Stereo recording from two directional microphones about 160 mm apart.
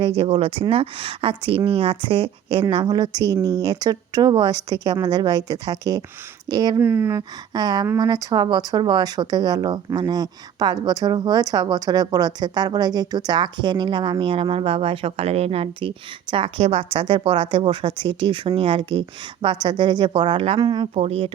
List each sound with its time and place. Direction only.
0.2 s speech: 35° right (ahead or behind)
6.8 s speech: 15° right (ahead or behind); by 21.2 s 40° right (ahead or behind)